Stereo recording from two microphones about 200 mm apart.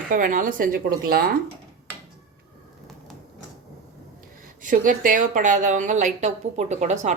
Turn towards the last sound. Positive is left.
turn(degrees=-35)  # may be behind; listen again after turning